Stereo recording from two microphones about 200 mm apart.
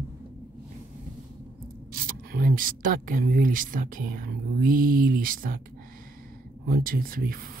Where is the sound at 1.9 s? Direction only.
45° right (ahead or behind).